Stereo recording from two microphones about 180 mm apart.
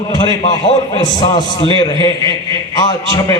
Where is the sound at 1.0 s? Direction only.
20° left (ahead or behind).